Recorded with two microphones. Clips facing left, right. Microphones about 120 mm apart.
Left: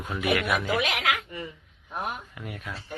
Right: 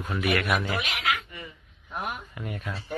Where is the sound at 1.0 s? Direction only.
90° left.